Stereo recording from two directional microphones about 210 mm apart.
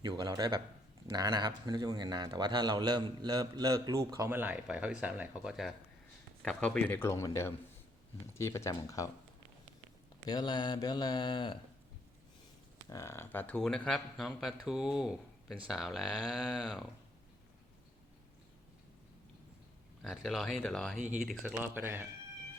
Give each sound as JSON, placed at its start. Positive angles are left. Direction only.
{"t": 0.0, "sound": "a man's voice", "side_deg": -20}
{"t": 10.2, "sound": "speech", "side_deg": 20}
{"t": 12.9, "sound": "speech", "side_deg": 15}
{"t": 20.0, "sound": "a man's voice", "side_deg": 0}